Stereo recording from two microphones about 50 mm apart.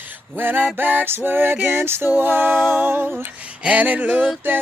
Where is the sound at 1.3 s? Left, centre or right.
Right.